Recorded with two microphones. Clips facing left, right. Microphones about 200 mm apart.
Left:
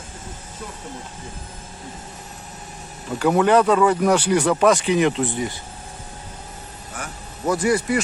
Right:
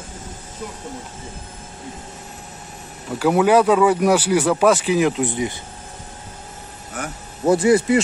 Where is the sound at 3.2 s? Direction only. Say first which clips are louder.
Right 1 dB; 5° right (ahead or behind).